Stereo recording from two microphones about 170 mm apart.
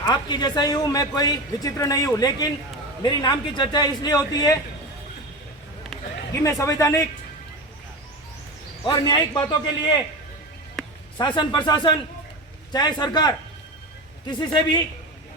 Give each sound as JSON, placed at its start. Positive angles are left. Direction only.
{"t": 0.1, "sound": "a man's voice", "side_deg": 25}
{"t": 6.4, "sound": "a man's voice", "side_deg": 20}
{"t": 8.8, "sound": "a man's voice", "side_deg": 25}
{"t": 11.2, "sound": "a man's voice", "side_deg": 25}